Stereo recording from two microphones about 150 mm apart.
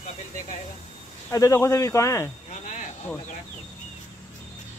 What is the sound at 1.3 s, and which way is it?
Speech, 20° left (ahead or behind).